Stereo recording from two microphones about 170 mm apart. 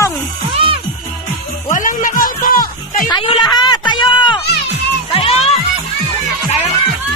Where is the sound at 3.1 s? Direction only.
25° left (ahead or behind).